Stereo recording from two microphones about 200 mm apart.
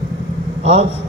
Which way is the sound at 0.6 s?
30° right (ahead or behind).